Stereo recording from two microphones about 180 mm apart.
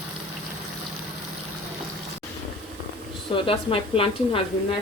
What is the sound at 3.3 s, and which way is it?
Speech, 30° left (ahead or behind).